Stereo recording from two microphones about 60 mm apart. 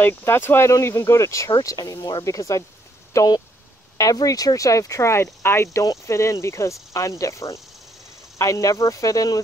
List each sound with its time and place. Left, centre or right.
0.0 s speech: left
0.7 s speech: left
4.0 s speech: left